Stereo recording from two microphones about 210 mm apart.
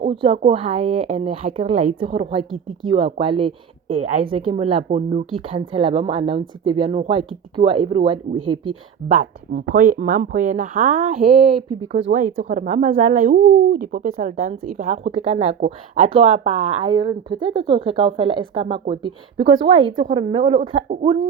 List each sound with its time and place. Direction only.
0.0 s speech: 25° right (ahead or behind)
2.4 s speech: centre (ahead or behind)
2.9 s speech: 25° right (ahead or behind)
9.0 s speech: 40° right (ahead or behind)
20.6 s speech: 35° right (ahead or behind)